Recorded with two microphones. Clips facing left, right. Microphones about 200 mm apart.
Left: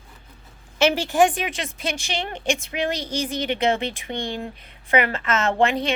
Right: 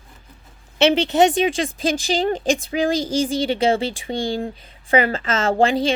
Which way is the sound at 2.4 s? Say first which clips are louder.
Right 4 dB; 90° right.